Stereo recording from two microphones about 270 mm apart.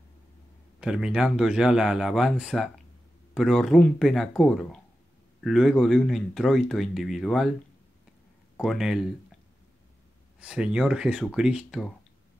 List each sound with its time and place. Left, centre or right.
0.7 s speech: centre
8.5 s speech: centre
10.4 s speech: centre